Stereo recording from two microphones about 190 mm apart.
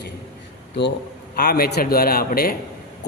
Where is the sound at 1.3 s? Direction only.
55° left (ahead or behind).